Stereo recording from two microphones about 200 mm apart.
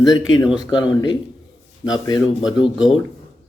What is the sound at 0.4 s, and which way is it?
Speech, 5° right (ahead or behind).